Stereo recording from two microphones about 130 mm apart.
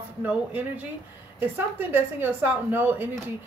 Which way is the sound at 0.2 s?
15° right (ahead or behind).